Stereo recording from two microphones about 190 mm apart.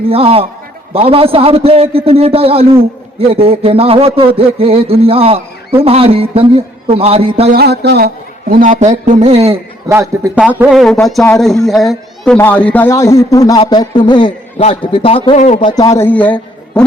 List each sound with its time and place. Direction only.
0.0 s a sound: 30° right (ahead or behind)
7.5 s a man's voice: 60° right (ahead or behind); by 9.6 s 35° right (ahead or behind)
9.9 s a man's voice: 10° right (ahead or behind); by 15.7 s 35° left (ahead or behind)
15.7 s a man's voice: 20° left (ahead or behind)